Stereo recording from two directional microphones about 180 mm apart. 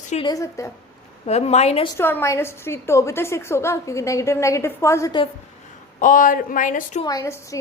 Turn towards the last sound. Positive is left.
turn(degrees=15)  # may be behind; listen again after turning